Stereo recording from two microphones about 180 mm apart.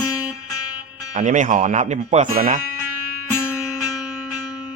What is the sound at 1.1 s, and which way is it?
Speech, 40° right (ahead or behind).